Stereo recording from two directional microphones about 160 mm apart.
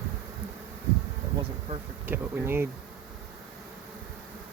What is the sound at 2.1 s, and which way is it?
Speech, 15° right (ahead or behind).